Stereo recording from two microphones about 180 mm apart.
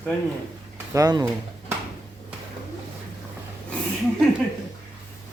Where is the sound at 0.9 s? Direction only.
20° right (ahead or behind).